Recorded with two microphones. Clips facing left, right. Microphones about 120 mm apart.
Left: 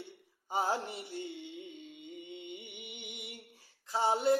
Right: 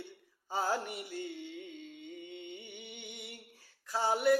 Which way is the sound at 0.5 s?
25° left (ahead or behind).